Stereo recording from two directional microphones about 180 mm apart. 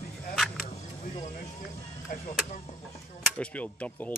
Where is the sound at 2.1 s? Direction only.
50° left (ahead or behind).